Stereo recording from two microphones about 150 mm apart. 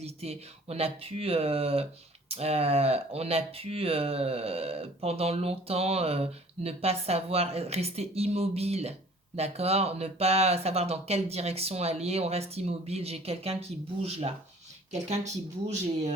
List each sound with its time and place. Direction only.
0.0 s speech: 45° right (ahead or behind)
15.8 s speech: 50° right (ahead or behind)